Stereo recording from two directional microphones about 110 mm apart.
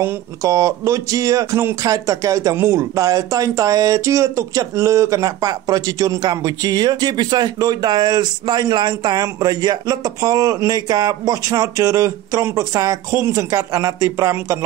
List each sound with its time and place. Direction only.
0.0 s speech: 25° right (ahead or behind)